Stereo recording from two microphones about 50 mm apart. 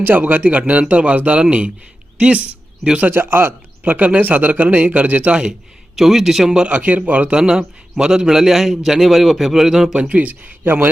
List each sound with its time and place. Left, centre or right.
0.0 s a man's voice: right
3.0 s a man's voice: right; by 5.5 s centre
6.0 s speech: centre
6.6 s speech: right
7.3 s a man's voice: centre
9.9 s a man's voice: right
10.6 s a man's voice: right